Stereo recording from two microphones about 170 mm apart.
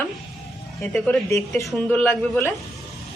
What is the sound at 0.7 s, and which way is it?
Speech, 5° left (ahead or behind).